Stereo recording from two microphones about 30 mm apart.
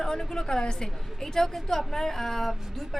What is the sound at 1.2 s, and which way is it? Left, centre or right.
Speech, centre.